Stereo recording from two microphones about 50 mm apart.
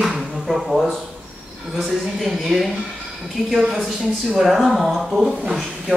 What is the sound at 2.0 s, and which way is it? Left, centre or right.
A man's voice, centre.